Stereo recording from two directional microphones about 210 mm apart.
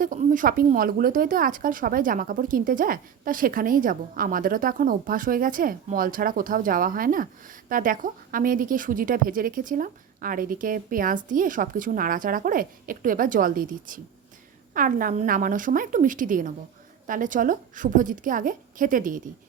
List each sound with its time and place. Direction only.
0.0 s speech: 40° right (ahead or behind)